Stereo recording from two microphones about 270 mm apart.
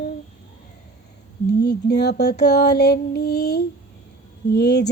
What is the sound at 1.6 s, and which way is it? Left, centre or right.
Music, left.